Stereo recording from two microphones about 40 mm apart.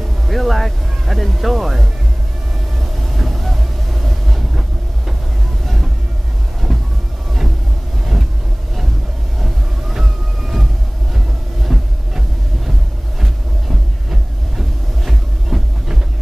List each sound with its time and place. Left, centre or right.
0.3 s speech: centre
2.8 s train: centre
6.6 s train: centre
9.4 s vehicle: centre
11.6 s heart murmur: centre
14.6 s a sound: centre